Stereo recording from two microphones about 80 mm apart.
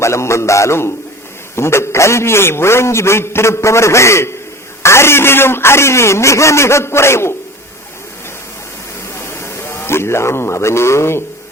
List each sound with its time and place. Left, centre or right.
0.0 s a man's voice: left
9.2 s a man's voice: left